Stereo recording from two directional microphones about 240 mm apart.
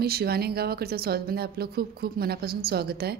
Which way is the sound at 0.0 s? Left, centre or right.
Right.